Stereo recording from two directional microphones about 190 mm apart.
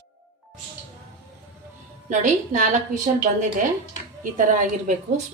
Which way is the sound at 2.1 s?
40° right (ahead or behind).